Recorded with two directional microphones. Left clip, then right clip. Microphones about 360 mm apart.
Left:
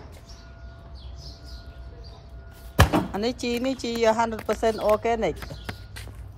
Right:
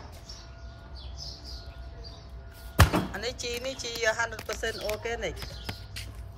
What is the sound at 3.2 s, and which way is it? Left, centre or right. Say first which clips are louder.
Speech: left 6 dB; centre.